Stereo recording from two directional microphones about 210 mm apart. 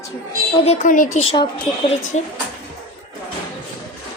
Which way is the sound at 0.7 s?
35° left (ahead or behind).